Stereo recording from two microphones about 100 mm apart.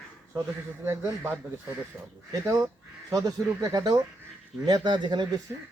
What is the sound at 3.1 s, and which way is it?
Speech, 35° right (ahead or behind).